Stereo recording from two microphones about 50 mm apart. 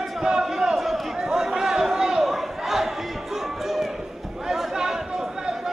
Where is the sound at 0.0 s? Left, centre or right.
Centre.